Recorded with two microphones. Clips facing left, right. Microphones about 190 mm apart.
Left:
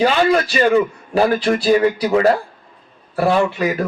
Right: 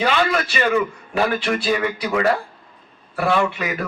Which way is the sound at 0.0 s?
35° left (ahead or behind).